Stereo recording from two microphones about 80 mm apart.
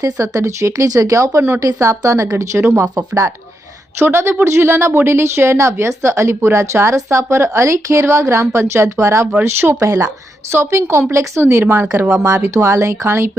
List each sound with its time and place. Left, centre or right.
0.0 s a woman's voice: right
3.9 s a woman's voice: right